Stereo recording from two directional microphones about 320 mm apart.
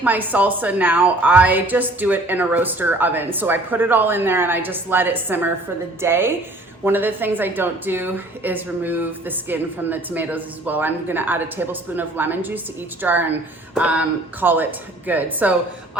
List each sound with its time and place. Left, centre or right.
0.0 s a woman's voice: centre